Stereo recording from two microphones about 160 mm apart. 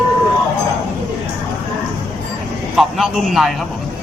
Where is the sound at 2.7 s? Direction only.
Centre (ahead or behind).